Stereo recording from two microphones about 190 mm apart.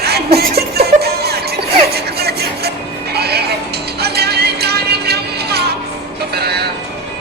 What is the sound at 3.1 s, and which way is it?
Neigh, 60° right (ahead or behind).